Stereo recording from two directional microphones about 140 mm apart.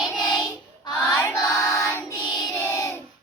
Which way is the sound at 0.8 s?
25° left (ahead or behind).